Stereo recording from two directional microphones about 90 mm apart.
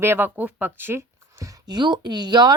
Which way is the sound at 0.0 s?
25° right (ahead or behind).